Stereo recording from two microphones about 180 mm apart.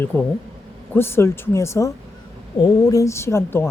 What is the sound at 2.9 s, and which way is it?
Speech, 15° left (ahead or behind).